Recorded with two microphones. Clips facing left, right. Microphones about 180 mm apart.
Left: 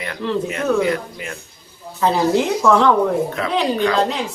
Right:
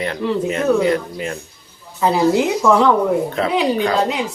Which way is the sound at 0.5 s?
30° right (ahead or behind).